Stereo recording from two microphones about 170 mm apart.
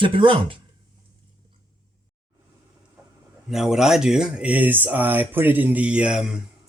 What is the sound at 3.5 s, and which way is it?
Speech, centre (ahead or behind).